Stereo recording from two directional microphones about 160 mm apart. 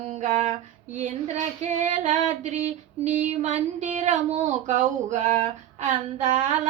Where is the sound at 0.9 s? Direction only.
50° right (ahead or behind).